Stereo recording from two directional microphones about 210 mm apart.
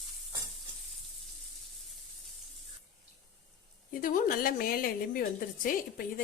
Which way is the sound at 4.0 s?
40° left (ahead or behind).